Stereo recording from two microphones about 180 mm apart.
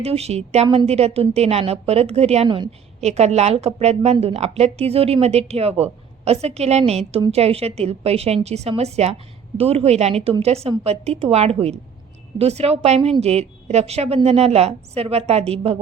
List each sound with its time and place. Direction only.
0.0 s a woman's voice: 35° right (ahead or behind)